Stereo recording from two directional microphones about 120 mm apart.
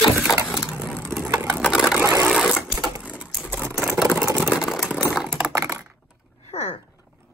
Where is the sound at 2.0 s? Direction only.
20° right (ahead or behind).